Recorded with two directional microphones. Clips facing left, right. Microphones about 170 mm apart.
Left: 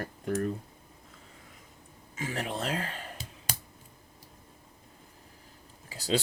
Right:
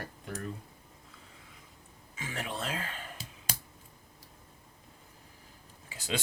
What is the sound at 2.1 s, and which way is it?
Speech, 40° left (ahead or behind).